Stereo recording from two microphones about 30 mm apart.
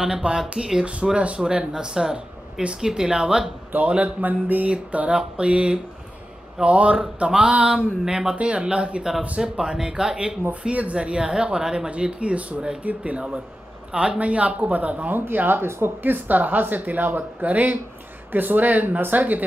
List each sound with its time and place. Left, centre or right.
0.2 s speech: right
4.0 s mantra: right
4.9 s speech: right
8.0 s speech: centre
8.4 s speech: right
10.7 s speech: right
11.0 s speech: right
12.0 s speech: right
15.0 s a woman's voice: right
18.3 s a woman's voice: right